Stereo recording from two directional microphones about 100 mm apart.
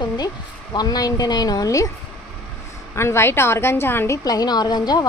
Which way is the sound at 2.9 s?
25° left (ahead or behind).